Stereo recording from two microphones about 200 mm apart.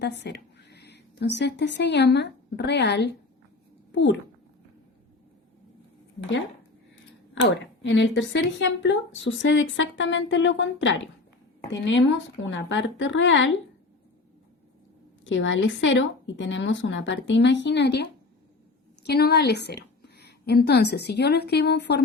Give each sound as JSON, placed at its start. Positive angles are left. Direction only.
{"t": 0.0, "sound": "a child's voice", "side_deg": 60}
{"t": 7.4, "sound": "speech", "side_deg": 65}
{"t": 15.2, "sound": "a woman's voice", "side_deg": 70}